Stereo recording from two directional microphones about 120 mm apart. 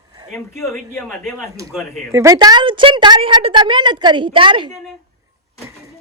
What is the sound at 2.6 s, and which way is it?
A woman's voice, 45° right (ahead or behind).